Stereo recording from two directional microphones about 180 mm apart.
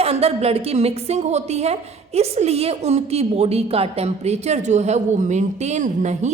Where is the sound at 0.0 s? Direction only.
35° right (ahead or behind).